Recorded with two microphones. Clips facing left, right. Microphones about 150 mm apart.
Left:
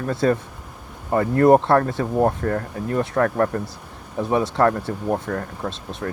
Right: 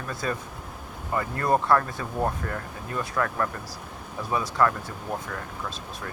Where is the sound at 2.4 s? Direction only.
45° left (ahead or behind).